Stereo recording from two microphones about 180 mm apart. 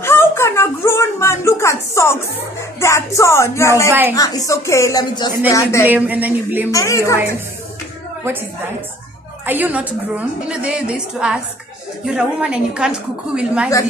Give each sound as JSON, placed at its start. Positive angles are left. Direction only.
{"t": 0.0, "sound": "speech", "side_deg": 15}
{"t": 5.9, "sound": "a woman's voice", "side_deg": -10}
{"t": 6.7, "sound": "speech", "side_deg": 15}
{"t": 9.5, "sound": "a woman's voice", "side_deg": -10}